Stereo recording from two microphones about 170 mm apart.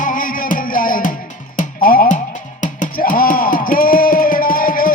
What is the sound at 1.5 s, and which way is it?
Music, 55° left (ahead or behind).